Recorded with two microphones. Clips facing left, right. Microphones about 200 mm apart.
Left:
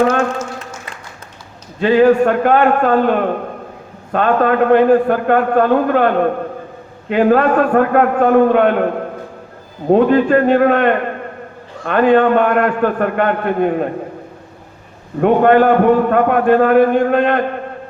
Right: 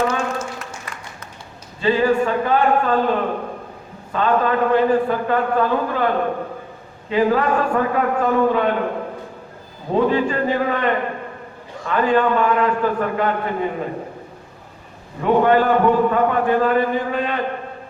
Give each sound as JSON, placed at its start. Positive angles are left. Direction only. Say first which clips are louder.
{"t": 1.8, "sound": "a man's voice", "louder": "left 7 dB", "side_deg": 65}
{"t": 9.9, "sound": "a man's voice", "louder": "left 7 dB", "side_deg": 65}
{"t": 15.2, "sound": "a man's voice", "louder": "left 5 dB", "side_deg": 60}